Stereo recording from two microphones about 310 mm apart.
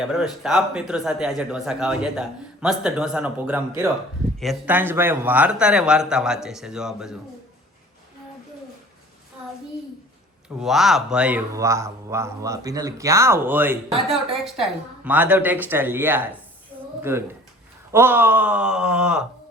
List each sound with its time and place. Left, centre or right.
0.0 s a man's voice: centre
10.6 s a man's voice: centre